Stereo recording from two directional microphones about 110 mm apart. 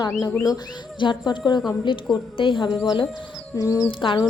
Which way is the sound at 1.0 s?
45° left (ahead or behind).